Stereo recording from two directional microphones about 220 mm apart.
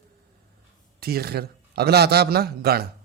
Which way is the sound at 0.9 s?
45° right (ahead or behind).